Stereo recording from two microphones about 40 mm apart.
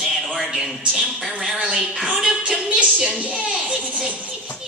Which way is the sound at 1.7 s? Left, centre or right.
Right.